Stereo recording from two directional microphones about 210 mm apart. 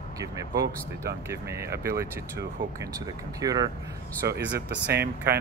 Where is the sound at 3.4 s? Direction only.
15° right (ahead or behind).